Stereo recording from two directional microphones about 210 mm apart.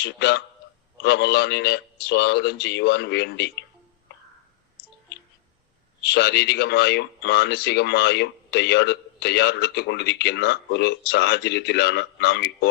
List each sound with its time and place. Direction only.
0.0 s speech: 55° left (ahead or behind)
6.0 s speech: 55° left (ahead or behind)